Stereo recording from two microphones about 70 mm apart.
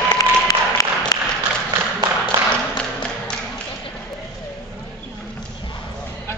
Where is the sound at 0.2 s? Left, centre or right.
Left.